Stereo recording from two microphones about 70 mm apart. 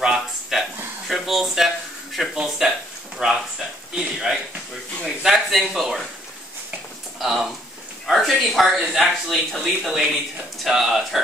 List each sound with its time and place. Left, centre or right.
0.0 s a sound: centre
2.2 s speech: centre
7.2 s speech: centre